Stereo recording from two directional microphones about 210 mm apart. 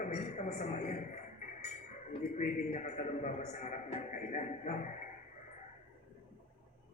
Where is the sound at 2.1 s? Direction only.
35° left (ahead or behind).